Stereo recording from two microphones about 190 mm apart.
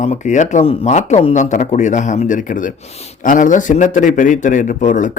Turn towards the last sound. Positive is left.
turn(degrees=40)  # may be behind; listen again after turning